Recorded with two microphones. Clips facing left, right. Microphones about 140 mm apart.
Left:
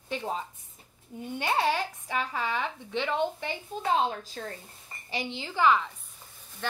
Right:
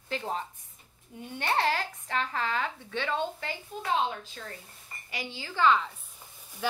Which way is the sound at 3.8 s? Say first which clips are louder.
Left 2 dB; 35° left (ahead or behind).